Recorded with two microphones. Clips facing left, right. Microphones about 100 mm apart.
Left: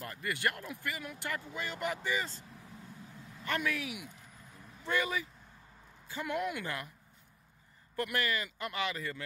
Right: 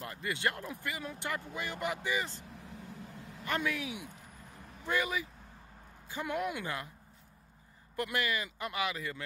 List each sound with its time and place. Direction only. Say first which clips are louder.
0.0 s speech: even; 20° right (ahead or behind)
3.4 s speech: even; 20° right (ahead or behind)
7.9 s speech: even; 15° right (ahead or behind)